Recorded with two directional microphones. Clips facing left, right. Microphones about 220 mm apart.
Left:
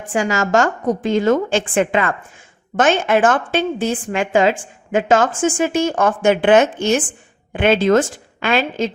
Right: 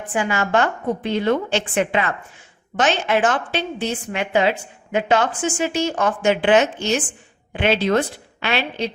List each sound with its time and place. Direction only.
0.0 s a woman's voice: 40° left (ahead or behind)